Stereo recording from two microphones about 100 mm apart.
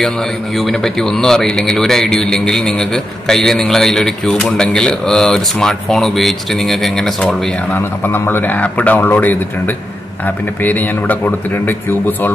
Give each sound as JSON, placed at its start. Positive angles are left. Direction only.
{"t": 0.6, "sound": "speech", "side_deg": 5}
{"t": 7.7, "sound": "a man's voice", "side_deg": 20}